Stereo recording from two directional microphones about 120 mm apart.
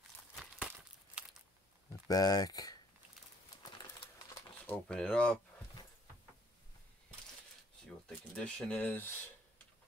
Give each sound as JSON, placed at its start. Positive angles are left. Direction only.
{"t": 2.0, "sound": "speech", "side_deg": 30}
{"t": 4.6, "sound": "speech", "side_deg": 5}
{"t": 8.4, "sound": "speech", "side_deg": 5}